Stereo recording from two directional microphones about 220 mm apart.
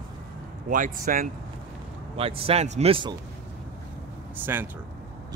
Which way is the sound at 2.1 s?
25° right (ahead or behind).